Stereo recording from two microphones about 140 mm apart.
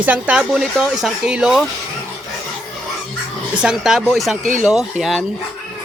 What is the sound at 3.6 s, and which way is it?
Speech, 5° right (ahead or behind).